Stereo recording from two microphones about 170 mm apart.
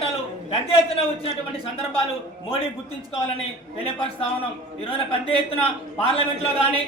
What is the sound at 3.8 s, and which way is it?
Speech, 35° left (ahead or behind).